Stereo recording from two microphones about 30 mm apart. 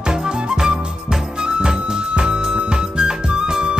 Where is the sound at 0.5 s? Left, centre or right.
Centre.